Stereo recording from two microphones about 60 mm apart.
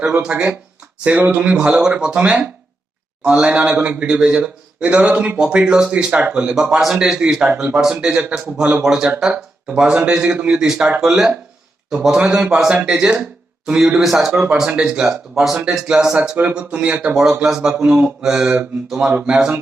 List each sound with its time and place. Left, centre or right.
0.0 s a man's voice: centre
1.0 s a man's voice: right; by 14.4 s centre
14.4 s a man's voice: centre
16.4 s a man's voice: right